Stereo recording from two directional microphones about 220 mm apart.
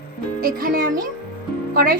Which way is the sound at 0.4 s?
40° right (ahead or behind).